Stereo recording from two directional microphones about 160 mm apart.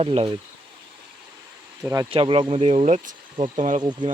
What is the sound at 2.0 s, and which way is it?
Speech, 35° right (ahead or behind).